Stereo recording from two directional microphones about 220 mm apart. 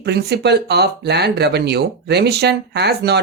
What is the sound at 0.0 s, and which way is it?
Speech, 50° right (ahead or behind).